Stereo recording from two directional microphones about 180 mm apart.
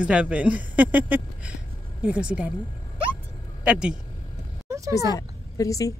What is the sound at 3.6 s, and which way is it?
Speech, 5° right (ahead or behind).